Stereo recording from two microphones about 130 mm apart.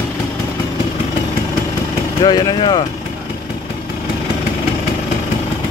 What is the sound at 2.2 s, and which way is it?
Speech, 35° left (ahead or behind).